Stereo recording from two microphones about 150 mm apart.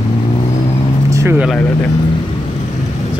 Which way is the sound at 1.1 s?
20° right (ahead or behind).